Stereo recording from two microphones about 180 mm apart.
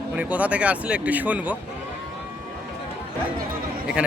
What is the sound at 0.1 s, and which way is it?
Speech, 10° right (ahead or behind).